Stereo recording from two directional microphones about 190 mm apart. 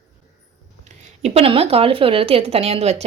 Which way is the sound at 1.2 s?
30° right (ahead or behind).